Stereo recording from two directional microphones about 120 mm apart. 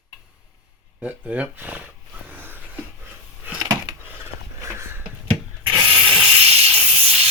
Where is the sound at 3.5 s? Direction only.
30° right (ahead or behind).